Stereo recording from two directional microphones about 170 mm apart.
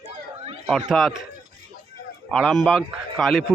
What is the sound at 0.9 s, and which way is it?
Speech, centre (ahead or behind).